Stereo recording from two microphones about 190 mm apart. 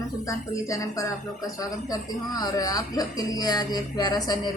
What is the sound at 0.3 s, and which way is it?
A woman's voice, 15° left (ahead or behind).